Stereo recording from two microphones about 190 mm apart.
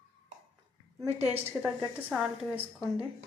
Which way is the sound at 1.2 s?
5° right (ahead or behind).